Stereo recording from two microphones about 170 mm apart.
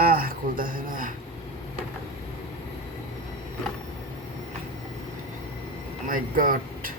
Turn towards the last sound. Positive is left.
turn(degrees=-55)  # may be behind; listen again after turning